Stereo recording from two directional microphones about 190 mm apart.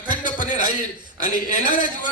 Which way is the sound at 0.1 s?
40° left (ahead or behind).